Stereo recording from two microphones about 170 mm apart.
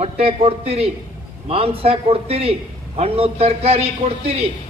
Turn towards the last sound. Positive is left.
turn(degrees=-35)  # may be behind; listen again after turning